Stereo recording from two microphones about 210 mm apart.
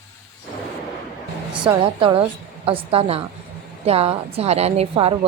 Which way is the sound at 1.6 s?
25° right (ahead or behind).